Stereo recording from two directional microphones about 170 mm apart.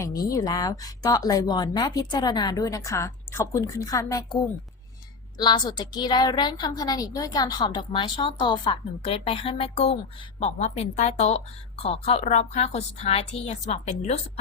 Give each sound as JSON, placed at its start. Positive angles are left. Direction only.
{"t": 0.0, "sound": "a woman's voice", "side_deg": 20}
{"t": 5.4, "sound": "a woman's voice", "side_deg": 25}